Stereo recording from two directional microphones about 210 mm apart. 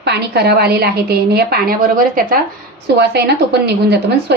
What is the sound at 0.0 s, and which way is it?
A woman's voice, 50° right (ahead or behind).